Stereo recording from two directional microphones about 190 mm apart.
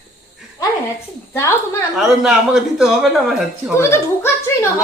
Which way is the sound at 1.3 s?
15° left (ahead or behind).